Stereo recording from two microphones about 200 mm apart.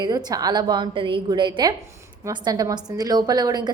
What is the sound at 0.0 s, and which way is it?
A woman's voice, 20° right (ahead or behind).